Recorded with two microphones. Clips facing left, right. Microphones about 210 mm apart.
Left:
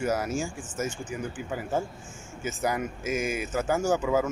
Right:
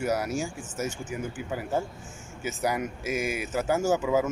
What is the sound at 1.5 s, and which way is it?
Speech, centre (ahead or behind).